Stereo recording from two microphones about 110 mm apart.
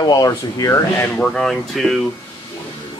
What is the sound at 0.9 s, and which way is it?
Speech, 10° left (ahead or behind).